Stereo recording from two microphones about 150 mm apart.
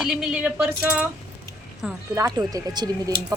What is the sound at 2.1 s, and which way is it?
A woman's voice, 20° right (ahead or behind).